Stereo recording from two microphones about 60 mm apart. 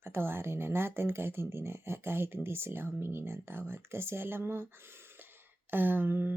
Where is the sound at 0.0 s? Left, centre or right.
Right.